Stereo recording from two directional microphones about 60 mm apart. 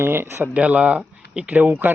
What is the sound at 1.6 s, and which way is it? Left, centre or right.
Speech, right.